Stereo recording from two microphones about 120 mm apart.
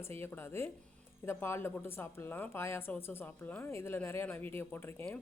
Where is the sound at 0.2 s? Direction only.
20° left (ahead or behind).